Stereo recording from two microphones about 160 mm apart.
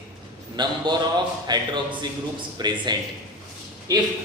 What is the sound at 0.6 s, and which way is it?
Speech, 25° right (ahead or behind).